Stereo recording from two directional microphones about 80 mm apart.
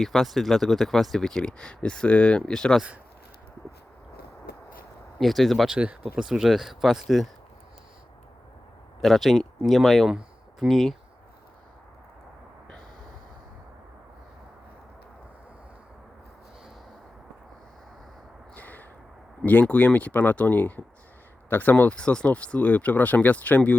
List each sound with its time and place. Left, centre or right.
0.0 s speech: centre
5.2 s speech: centre
5.6 s speech: centre
9.0 s speech: centre
10.2 s a sound: centre
18.5 s a sound: left
19.5 s speech: centre